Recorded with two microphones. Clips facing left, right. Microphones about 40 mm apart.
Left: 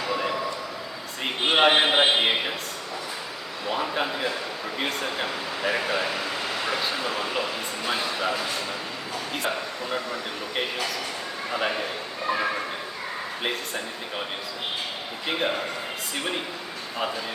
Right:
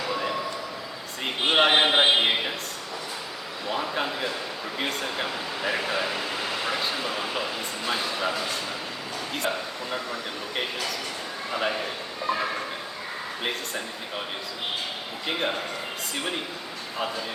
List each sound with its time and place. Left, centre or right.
0.0 s a sound: centre
1.2 s a man's voice: centre
3.7 s a man's voice: centre
9.9 s a man's voice: centre
15.3 s speech: centre